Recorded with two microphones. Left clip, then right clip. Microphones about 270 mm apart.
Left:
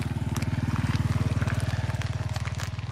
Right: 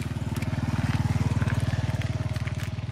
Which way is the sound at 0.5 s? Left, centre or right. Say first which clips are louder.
Right 2 dB; centre.